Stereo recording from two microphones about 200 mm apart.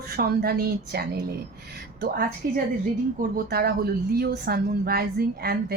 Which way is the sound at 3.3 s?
50° right (ahead or behind).